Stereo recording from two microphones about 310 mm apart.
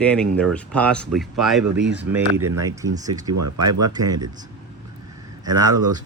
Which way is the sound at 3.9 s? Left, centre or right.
Centre.